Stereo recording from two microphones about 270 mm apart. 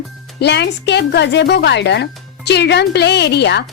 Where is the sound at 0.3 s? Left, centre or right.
Left.